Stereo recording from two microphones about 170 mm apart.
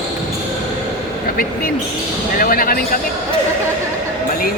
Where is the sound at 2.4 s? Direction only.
55° left (ahead or behind).